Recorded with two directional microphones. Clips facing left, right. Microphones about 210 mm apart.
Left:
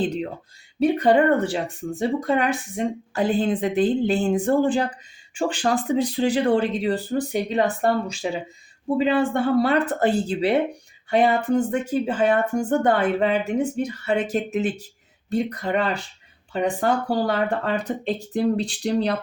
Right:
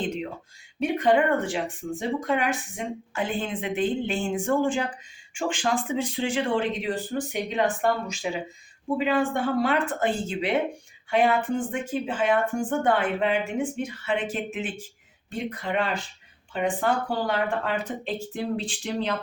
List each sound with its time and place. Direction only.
0.0 s a sound: 35° left (ahead or behind)
0.8 s speech: 35° left (ahead or behind)
9.6 s speech: 35° left (ahead or behind)